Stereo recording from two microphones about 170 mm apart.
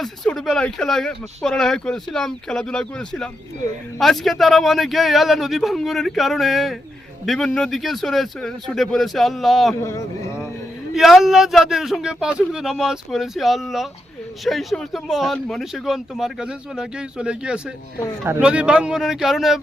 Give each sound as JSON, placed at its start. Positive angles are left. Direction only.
{"t": 0.0, "sound": "speech", "side_deg": 0}
{"t": 9.8, "sound": "speech", "side_deg": 15}
{"t": 10.9, "sound": "speech", "side_deg": 0}